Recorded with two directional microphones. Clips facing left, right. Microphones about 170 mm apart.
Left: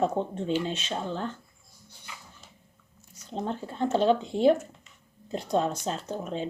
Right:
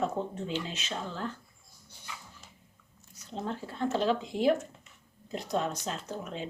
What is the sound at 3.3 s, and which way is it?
Speech, 25° left (ahead or behind).